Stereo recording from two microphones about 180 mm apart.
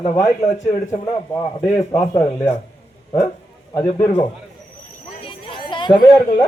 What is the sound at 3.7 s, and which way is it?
Speech, 15° left (ahead or behind).